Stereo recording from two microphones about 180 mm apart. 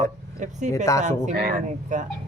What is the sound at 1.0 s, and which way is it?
Speech, 40° right (ahead or behind).